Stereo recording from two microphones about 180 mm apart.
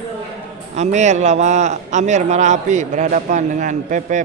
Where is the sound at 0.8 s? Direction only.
40° right (ahead or behind).